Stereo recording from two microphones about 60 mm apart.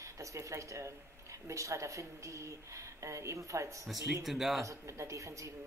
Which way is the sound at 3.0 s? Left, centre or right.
Right.